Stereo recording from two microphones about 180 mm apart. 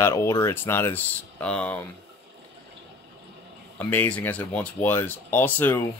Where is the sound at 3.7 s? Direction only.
10° left (ahead or behind).